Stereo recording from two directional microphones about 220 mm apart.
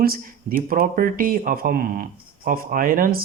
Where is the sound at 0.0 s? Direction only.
40° right (ahead or behind).